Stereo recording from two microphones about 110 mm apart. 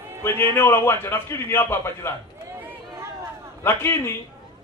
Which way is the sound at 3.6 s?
20° left (ahead or behind).